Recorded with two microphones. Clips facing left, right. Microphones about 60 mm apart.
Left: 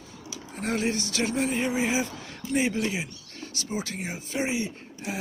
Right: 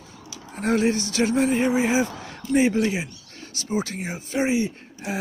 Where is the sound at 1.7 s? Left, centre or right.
Right.